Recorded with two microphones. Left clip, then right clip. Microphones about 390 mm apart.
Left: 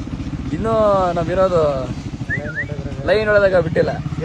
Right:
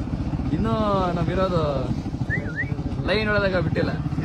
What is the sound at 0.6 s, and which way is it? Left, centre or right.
Speech, centre.